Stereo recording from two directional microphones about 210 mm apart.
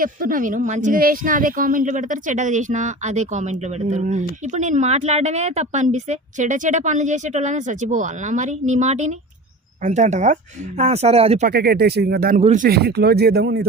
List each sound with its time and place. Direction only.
0.0 s speech: 40° right (ahead or behind)
11.4 s speech: 50° right (ahead or behind)
12.4 s speech: 35° right (ahead or behind)
12.6 s speech: 50° right (ahead or behind)